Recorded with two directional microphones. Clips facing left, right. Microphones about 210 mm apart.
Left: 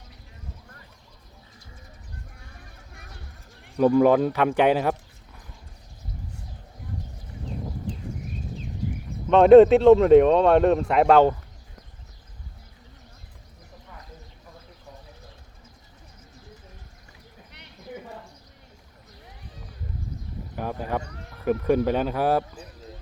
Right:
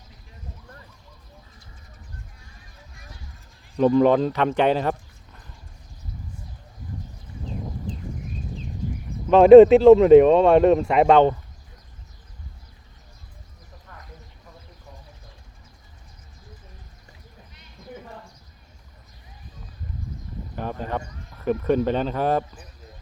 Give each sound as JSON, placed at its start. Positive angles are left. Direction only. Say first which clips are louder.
{"t": 2.6, "sound": "clip-clop", "louder": "left 2 dB", "side_deg": 60}
{"t": 3.8, "sound": "a man's voice", "louder": "even", "side_deg": 10}
{"t": 9.3, "sound": "speech", "louder": "right 3 dB", "side_deg": 0}
{"t": 20.6, "sound": "a sound", "louder": "even", "side_deg": 10}
{"t": 21.4, "sound": "speech", "louder": "even", "side_deg": 10}